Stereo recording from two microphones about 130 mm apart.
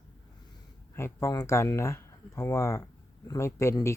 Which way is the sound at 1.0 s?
20° left (ahead or behind).